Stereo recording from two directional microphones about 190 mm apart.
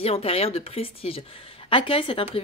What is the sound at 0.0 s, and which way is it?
Speech, 30° left (ahead or behind).